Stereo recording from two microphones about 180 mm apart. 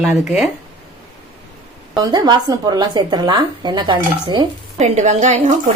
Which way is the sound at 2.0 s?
25° right (ahead or behind).